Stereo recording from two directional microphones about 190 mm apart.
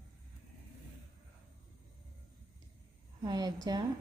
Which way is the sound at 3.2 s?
20° right (ahead or behind).